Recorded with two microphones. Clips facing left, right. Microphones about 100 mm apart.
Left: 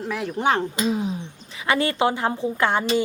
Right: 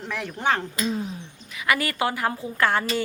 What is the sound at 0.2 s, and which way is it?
Speech, 30° left (ahead or behind).